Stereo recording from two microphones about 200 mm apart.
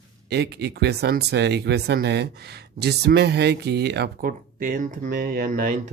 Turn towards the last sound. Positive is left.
turn(degrees=-40)  # may be behind; listen again after turning